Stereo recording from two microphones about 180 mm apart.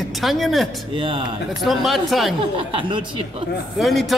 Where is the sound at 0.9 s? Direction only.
30° right (ahead or behind).